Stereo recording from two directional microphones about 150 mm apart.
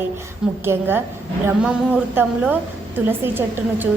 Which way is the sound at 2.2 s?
10° right (ahead or behind).